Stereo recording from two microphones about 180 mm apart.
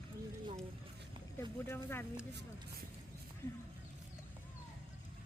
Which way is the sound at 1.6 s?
15° left (ahead or behind).